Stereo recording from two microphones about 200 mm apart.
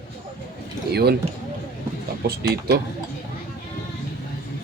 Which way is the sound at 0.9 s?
55° right (ahead or behind).